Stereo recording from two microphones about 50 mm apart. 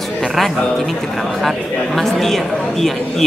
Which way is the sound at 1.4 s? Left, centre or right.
Centre.